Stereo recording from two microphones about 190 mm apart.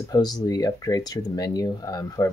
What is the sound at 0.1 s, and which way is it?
Speech, 20° left (ahead or behind).